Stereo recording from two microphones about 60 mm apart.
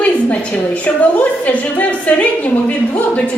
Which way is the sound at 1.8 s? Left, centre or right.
Left.